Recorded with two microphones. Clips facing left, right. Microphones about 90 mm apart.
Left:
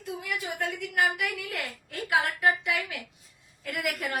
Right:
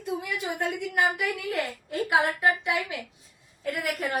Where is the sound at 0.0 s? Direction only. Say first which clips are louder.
Right 3 dB; 25° right (ahead or behind).